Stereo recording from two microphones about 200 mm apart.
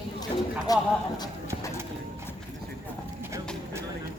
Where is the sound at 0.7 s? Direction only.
20° left (ahead or behind).